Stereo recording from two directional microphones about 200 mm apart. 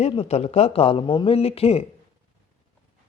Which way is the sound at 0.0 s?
30° left (ahead or behind).